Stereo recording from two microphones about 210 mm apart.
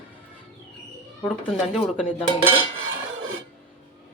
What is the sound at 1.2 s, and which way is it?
Speech, centre (ahead or behind).